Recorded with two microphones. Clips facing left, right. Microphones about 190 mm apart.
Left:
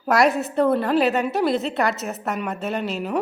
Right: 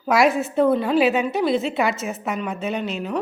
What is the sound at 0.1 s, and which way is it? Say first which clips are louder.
A woman's voice: right 1 dB; centre (ahead or behind).